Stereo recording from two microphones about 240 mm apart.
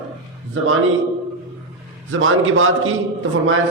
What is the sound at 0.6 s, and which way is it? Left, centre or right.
Speech, right.